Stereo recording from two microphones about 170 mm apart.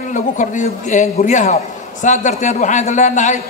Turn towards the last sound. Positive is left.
turn(degrees=45)  # may be behind; listen again after turning